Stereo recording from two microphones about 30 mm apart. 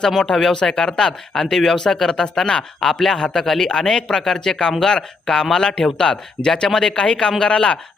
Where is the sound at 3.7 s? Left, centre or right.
Left.